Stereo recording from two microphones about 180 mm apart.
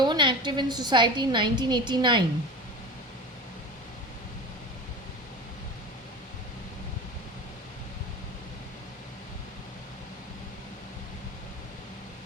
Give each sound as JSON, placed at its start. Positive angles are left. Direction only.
{"t": 0.0, "sound": "a woman's voice", "side_deg": -25}